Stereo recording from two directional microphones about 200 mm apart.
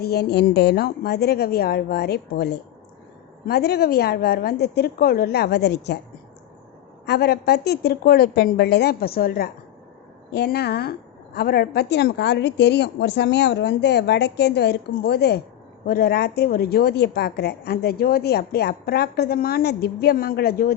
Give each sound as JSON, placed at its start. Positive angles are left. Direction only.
{"t": 0.0, "sound": "a woman's voice", "side_deg": 55}
{"t": 7.0, "sound": "a woman's voice", "side_deg": 55}